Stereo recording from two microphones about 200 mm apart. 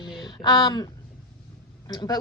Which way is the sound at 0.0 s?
20° left (ahead or behind).